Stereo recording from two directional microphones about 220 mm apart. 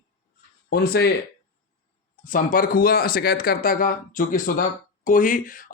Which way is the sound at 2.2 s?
40° left (ahead or behind).